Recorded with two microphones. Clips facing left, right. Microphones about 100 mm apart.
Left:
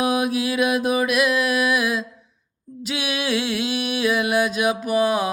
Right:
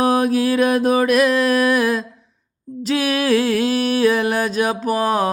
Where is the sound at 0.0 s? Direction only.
35° right (ahead or behind).